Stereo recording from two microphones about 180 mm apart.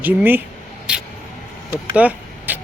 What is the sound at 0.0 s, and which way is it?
Speech, 10° right (ahead or behind).